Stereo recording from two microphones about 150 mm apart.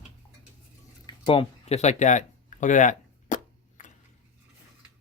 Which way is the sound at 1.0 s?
35° left (ahead or behind).